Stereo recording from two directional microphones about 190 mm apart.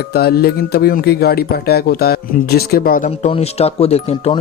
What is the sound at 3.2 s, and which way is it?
Speech, 35° left (ahead or behind).